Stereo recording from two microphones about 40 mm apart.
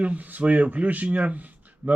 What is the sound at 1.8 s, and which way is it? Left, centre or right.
Speech, right.